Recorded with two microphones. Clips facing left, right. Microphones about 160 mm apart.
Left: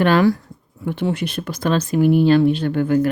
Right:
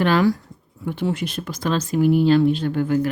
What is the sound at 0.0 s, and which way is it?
Speech, 60° left (ahead or behind).